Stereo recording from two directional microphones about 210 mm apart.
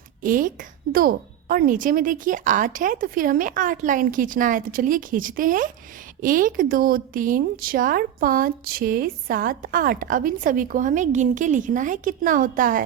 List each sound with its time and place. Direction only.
0.2 s a woman's voice: 40° right (ahead or behind)